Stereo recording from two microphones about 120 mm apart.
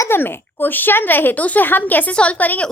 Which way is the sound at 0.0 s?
20° left (ahead or behind).